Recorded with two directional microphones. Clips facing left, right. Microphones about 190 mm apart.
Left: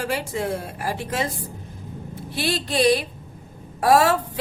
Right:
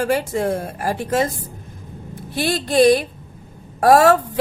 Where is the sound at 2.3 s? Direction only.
45° right (ahead or behind).